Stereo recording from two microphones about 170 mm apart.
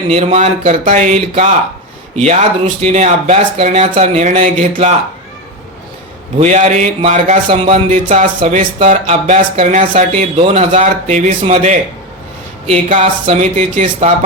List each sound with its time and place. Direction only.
0.1 s speech: 40° right (ahead or behind)
6.4 s speech: 40° right (ahead or behind)
7.4 s speech: 35° right (ahead or behind)